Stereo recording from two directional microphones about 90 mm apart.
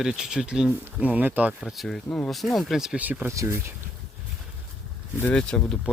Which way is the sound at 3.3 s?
35° right (ahead or behind).